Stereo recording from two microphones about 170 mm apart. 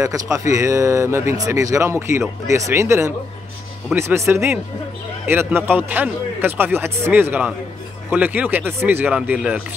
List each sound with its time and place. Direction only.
0.0 s speech: 20° right (ahead or behind)